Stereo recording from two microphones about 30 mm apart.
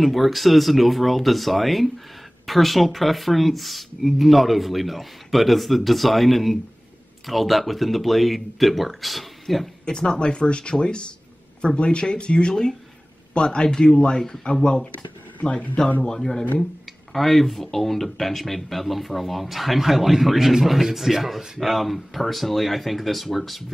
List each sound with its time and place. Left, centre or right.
0.0 s speech: centre
9.8 s speech: left
16.2 s speech: centre